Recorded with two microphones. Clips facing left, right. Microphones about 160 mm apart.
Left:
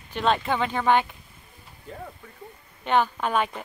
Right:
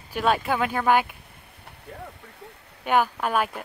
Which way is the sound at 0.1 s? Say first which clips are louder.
Right 1 dB; 5° right (ahead or behind).